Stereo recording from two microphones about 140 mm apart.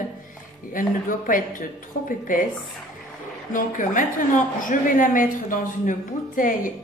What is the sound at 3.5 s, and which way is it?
A woman's voice, 70° left (ahead or behind).